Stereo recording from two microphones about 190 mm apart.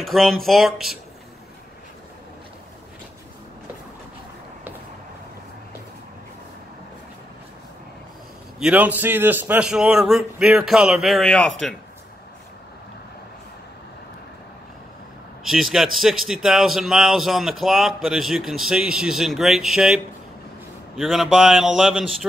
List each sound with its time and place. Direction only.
0.0 s a man's voice: centre (ahead or behind)
8.5 s a man's voice: 5° right (ahead or behind)
15.4 s a man's voice: centre (ahead or behind)